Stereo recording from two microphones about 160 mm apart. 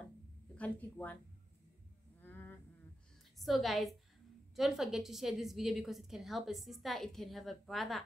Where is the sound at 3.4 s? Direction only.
Centre (ahead or behind).